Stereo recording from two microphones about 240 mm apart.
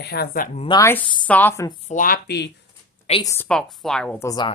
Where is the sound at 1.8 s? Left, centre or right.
Left.